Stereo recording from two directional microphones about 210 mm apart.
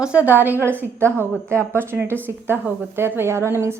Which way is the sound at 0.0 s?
5° right (ahead or behind).